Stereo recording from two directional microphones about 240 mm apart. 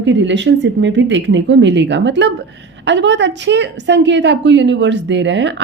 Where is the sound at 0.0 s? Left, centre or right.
Right.